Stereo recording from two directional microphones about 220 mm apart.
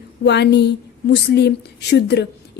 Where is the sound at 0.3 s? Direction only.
50° left (ahead or behind).